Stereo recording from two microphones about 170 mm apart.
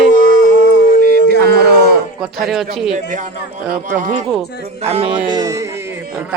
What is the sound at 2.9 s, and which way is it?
Speech, 45° right (ahead or behind).